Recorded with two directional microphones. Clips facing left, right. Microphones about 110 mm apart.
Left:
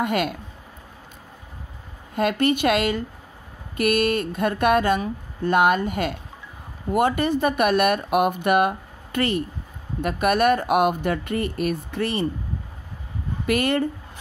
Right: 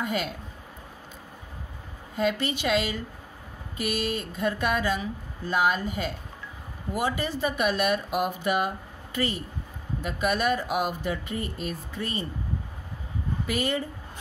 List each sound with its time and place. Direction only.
0.0 s speech: 65° left (ahead or behind)
2.1 s speech: 60° left (ahead or behind)
13.5 s speech: 60° left (ahead or behind)